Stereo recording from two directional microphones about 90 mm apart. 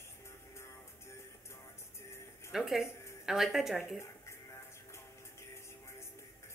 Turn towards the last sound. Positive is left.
turn(degrees=30)  # may be behind; listen again after turning